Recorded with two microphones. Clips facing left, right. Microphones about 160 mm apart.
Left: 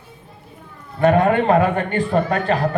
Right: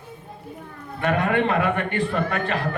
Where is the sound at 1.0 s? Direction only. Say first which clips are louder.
Left 6 dB; 35° left (ahead or behind).